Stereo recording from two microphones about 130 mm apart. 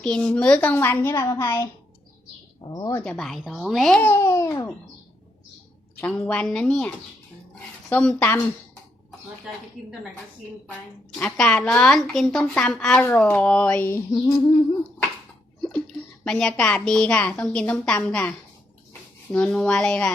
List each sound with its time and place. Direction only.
0.0 s a woman's voice: 5° left (ahead or behind); by 2.9 s 30° left (ahead or behind)
3.0 s a woman's voice: 5° left (ahead or behind)
4.0 s a child's voice: 20° left (ahead or behind)
6.0 s a woman's voice: 10° left (ahead or behind)
11.2 s a woman's voice: 5° left (ahead or behind)
14.1 s a child's voice: 25° left (ahead or behind)
16.2 s a woman's voice: 5° left (ahead or behind)